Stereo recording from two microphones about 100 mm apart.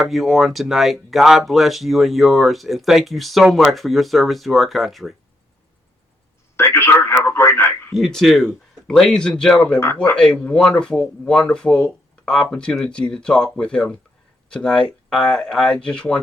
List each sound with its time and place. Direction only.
0.0 s speech: centre (ahead or behind)
6.6 s speech: 25° left (ahead or behind)
7.9 s speech: 5° left (ahead or behind)